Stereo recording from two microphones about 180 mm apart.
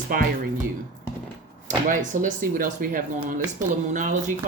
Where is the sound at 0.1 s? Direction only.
50° right (ahead or behind).